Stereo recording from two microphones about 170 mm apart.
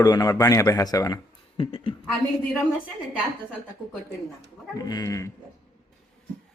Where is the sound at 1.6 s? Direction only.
35° left (ahead or behind).